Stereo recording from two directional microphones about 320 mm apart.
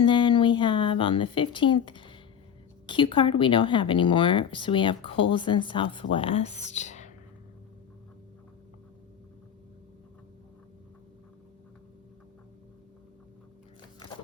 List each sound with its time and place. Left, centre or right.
0.0 s speech: centre